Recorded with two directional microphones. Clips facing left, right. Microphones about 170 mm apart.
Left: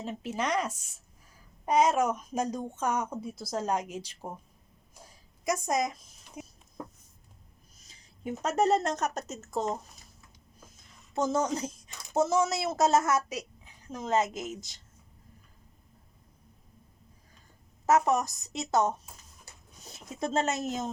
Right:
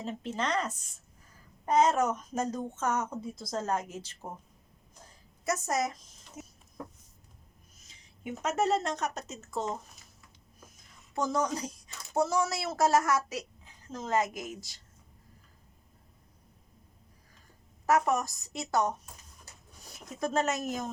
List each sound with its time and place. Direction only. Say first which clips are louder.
0.0 s speech: left 1 dB; 5° left (ahead or behind)
4.9 s a sound: left 2 dB; 10° left (ahead or behind)
7.8 s speech: left 4 dB; 35° left (ahead or behind)
11.1 s a woman's voice: left 2 dB; 25° left (ahead or behind)
17.8 s a woman's voice: left 2 dB; 20° left (ahead or behind)